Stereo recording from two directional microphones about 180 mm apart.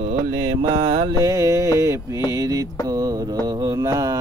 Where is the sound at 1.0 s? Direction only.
20° right (ahead or behind).